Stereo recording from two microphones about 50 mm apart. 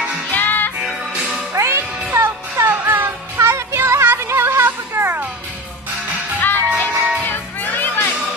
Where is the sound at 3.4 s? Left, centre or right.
Right.